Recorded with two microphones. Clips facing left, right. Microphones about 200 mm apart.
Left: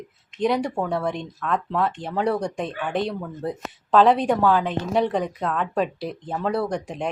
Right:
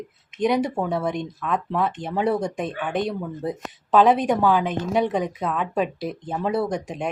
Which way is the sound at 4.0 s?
20° right (ahead or behind).